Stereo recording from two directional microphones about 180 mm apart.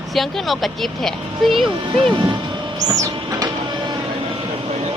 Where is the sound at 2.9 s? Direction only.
20° right (ahead or behind).